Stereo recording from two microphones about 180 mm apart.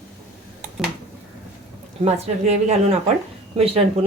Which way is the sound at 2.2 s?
35° right (ahead or behind).